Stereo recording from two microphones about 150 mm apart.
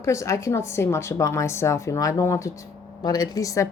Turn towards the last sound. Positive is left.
turn(degrees=20)  # may be behind; listen again after turning